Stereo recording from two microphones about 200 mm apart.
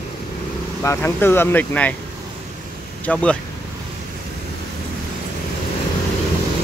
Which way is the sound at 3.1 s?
5° left (ahead or behind).